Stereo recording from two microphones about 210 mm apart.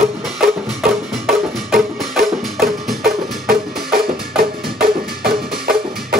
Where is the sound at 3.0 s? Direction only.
45° right (ahead or behind).